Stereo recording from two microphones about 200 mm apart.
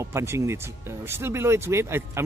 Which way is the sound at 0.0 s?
15° right (ahead or behind).